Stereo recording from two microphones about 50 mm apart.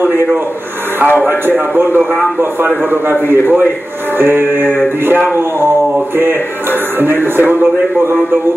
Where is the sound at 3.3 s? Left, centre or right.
Right.